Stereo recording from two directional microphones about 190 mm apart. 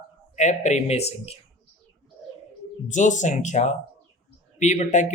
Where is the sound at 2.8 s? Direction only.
40° left (ahead or behind).